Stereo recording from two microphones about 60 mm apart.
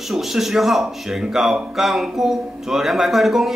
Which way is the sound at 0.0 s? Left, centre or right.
Centre.